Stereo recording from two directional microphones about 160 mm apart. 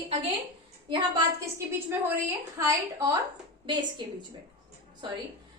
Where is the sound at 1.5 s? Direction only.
15° right (ahead or behind).